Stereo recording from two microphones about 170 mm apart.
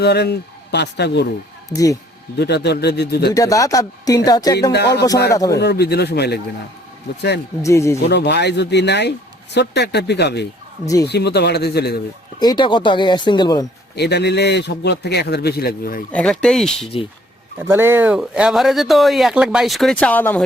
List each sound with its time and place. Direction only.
0.0 s a man's voice: 75° left (ahead or behind)
1.7 s speech: 20° left (ahead or behind)
2.4 s speech: 80° left
3.3 s speech: 20° left (ahead or behind)
4.7 s a man's voice: 75° left (ahead or behind)
5.3 s speech: 20° left (ahead or behind)
5.5 s a man's voice: 75° left (ahead or behind)
7.6 s speech: 15° left (ahead or behind)
8.1 s a man's voice: 80° left
12.4 s speech: 25° left (ahead or behind)
13.9 s a man's voice: 80° left; by 16.0 s 60° left (ahead or behind)
16.1 s speech: 5° left (ahead or behind)
17.7 s speech: 15° right (ahead or behind); by 20.4 s 10° left (ahead or behind)